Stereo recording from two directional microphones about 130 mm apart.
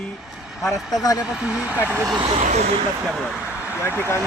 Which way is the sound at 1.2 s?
5° right (ahead or behind).